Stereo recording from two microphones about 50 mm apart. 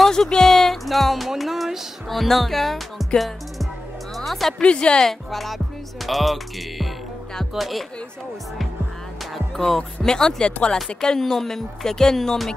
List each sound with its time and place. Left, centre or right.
0.0 s a sound: centre
0.4 s music: centre
4.2 s speech: centre
4.6 s a woman's voice: left
5.0 s music: centre
9.6 s speech: centre